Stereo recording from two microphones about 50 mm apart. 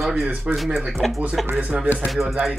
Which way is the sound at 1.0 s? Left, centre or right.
Centre.